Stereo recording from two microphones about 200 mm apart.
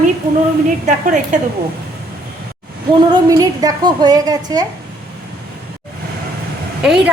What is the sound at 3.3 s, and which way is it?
A woman's voice, 15° right (ahead or behind).